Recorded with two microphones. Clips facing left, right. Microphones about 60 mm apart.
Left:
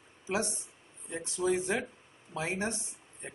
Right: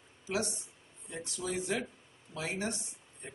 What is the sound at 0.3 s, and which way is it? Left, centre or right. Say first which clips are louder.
Speech: left 2 dB; left.